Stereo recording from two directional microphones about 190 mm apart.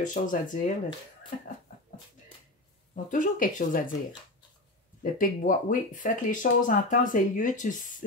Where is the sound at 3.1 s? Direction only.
45° left (ahead or behind).